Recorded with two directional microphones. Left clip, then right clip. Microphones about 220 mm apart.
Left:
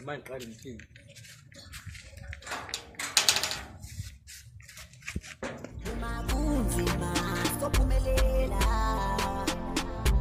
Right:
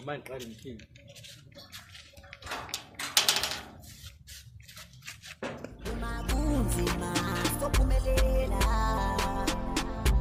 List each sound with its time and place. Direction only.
0.0 s speech: 5° right (ahead or behind)
2.3 s typewriter: 5° right (ahead or behind)
5.4 s music: 5° right (ahead or behind)